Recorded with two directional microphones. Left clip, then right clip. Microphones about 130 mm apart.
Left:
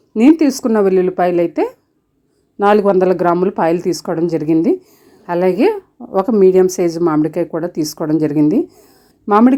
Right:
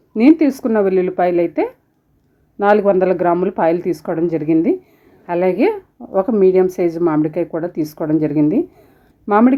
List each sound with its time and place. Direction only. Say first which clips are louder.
0.1 s a woman's voice: left 1 dB; 35° left (ahead or behind)